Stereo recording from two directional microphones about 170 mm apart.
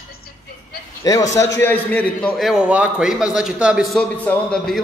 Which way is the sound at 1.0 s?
20° left (ahead or behind).